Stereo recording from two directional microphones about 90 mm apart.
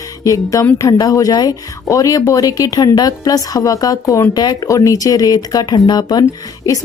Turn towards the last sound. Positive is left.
turn(degrees=50)  # may be behind; listen again after turning